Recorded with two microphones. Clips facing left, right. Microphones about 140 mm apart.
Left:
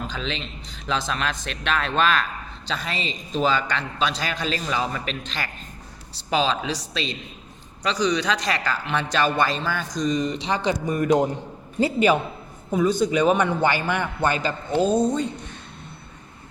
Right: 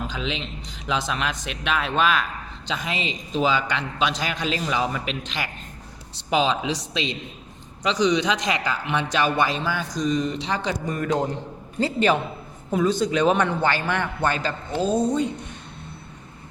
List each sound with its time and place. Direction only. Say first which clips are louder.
0.1 s a man's voice: right 1 dB; 10° right (ahead or behind); by 14.9 s 5° left (ahead or behind)
14.9 s a man's voice: even; 10° right (ahead or behind)